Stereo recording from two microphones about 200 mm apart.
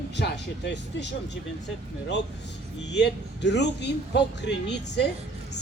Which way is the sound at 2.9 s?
60° left (ahead or behind).